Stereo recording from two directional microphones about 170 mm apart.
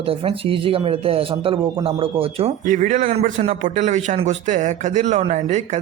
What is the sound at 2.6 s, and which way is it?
A man's voice, 45° right (ahead or behind).